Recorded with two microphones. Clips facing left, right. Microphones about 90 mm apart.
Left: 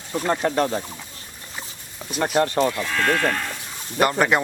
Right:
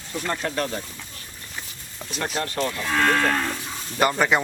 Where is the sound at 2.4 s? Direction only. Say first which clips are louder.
Left 7 dB; 25° left (ahead or behind).